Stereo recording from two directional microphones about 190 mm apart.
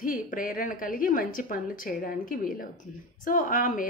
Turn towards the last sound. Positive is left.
turn(degrees=45)  # may be behind; listen again after turning